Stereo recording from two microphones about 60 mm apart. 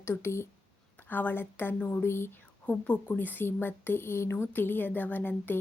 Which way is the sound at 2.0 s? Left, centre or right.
Left.